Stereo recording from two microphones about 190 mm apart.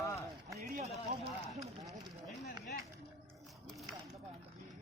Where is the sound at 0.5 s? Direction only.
40° right (ahead or behind).